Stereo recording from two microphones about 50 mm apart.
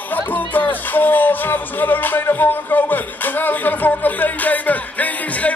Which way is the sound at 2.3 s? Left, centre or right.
Left.